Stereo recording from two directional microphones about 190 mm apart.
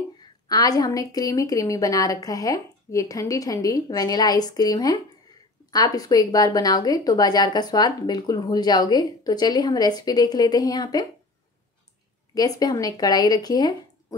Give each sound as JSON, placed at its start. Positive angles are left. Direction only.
{"t": 0.2, "sound": "a woman's voice", "side_deg": 20}
{"t": 12.4, "sound": "a woman's voice", "side_deg": 20}